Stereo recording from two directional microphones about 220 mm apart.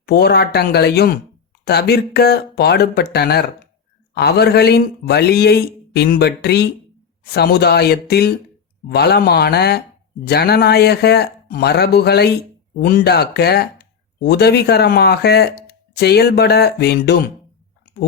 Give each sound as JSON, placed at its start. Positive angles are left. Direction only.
{"t": 0.0, "sound": "speech", "side_deg": 45}